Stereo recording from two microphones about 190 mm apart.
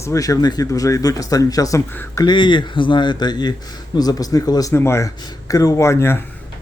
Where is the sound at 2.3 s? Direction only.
25° left (ahead or behind).